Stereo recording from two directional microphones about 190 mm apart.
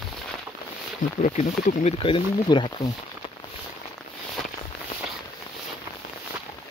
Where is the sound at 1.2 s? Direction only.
40° left (ahead or behind).